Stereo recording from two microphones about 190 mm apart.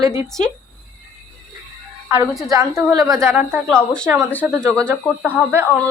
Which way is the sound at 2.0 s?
5° right (ahead or behind).